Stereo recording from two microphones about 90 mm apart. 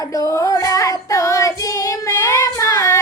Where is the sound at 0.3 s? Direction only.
40° left (ahead or behind).